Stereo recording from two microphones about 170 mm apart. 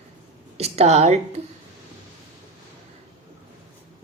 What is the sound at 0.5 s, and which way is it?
Speech, 40° right (ahead or behind).